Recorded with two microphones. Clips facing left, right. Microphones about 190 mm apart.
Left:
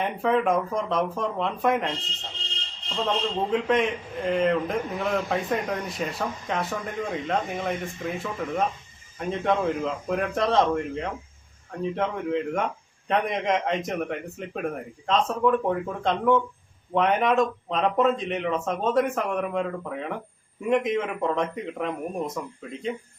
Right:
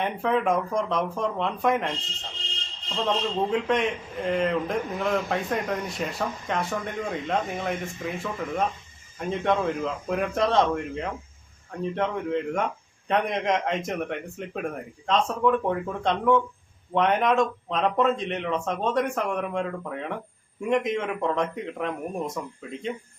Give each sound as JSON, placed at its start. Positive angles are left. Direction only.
{"t": 0.0, "sound": "a man's voice", "side_deg": 0}
{"t": 3.0, "sound": "a man's voice", "side_deg": 0}